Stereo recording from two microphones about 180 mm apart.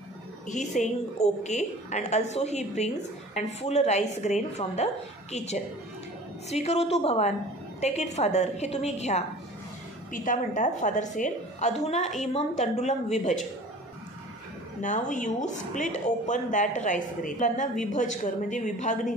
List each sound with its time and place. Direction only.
0.5 s a woman's voice: 40° left (ahead or behind)
14.8 s speech: 45° left (ahead or behind)